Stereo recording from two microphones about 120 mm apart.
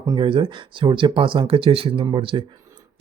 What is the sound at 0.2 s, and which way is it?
Speech, 45° right (ahead or behind).